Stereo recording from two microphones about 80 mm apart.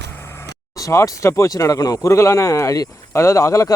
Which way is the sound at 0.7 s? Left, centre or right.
Left.